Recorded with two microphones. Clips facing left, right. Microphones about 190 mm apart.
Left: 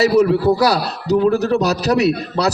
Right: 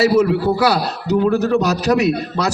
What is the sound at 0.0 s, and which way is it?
A man's voice, 40° left (ahead or behind).